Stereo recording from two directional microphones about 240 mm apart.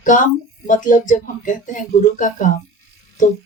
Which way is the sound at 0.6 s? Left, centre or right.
Left.